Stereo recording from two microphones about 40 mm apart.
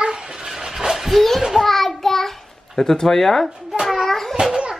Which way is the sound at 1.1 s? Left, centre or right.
Centre.